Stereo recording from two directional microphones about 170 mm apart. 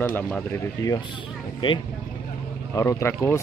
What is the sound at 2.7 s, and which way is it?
Speech, 15° left (ahead or behind).